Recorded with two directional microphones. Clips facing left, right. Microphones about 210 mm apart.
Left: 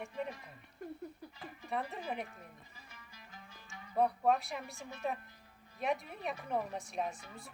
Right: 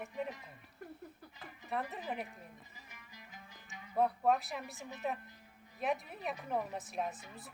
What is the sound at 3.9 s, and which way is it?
Speech, centre (ahead or behind).